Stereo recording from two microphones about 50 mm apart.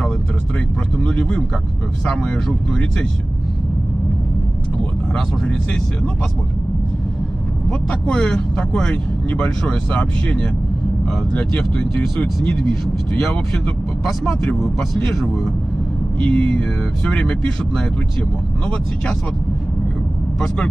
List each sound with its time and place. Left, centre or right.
0.9 s speech: left
2.0 s speech: centre
7.9 s speech: centre
16.2 s speech: left